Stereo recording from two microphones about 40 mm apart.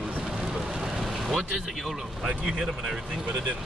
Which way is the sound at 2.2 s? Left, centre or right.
Centre.